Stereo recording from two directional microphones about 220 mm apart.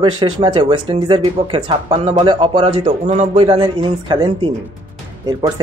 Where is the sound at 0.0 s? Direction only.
20° right (ahead or behind).